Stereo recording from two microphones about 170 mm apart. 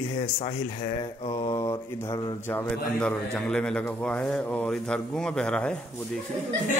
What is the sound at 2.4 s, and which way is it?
A man's voice, 10° left (ahead or behind).